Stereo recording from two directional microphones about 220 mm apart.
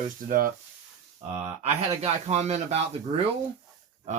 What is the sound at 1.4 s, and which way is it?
Speech, 30° right (ahead or behind).